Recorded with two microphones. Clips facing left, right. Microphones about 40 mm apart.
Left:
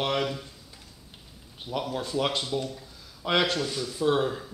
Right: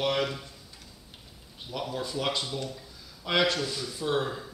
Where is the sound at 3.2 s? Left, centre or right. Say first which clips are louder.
Left 1 dB; left.